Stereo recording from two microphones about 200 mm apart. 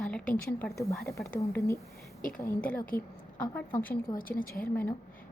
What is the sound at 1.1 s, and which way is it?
A woman's voice, 15° left (ahead or behind).